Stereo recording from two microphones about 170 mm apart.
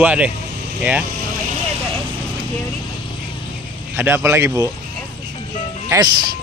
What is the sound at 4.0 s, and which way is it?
Speech, 15° right (ahead or behind).